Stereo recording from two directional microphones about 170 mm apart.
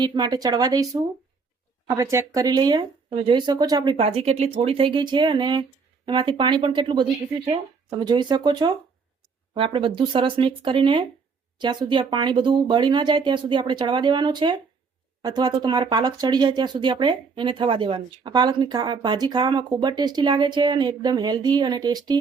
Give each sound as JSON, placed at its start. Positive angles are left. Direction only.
{"t": 0.0, "sound": "speech", "side_deg": -25}